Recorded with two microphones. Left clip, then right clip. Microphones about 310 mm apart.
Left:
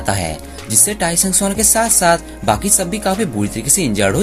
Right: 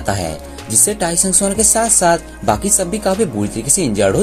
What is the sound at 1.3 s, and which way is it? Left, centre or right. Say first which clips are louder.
Speech: right 1 dB; centre.